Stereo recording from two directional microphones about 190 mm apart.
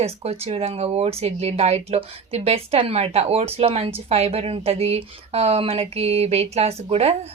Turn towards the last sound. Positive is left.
turn(degrees=-35)  # may be behind; listen again after turning